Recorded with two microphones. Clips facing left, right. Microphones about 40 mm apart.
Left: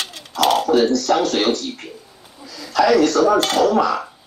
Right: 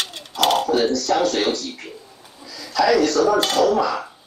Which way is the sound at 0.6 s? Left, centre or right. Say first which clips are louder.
Left 3 dB; left.